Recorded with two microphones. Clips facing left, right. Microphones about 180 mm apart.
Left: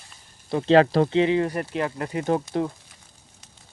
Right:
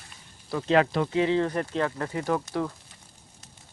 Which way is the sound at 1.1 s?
20° left (ahead or behind).